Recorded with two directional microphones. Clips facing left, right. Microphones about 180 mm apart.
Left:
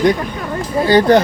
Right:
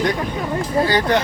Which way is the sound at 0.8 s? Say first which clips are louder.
Left 10 dB; 30° left (ahead or behind).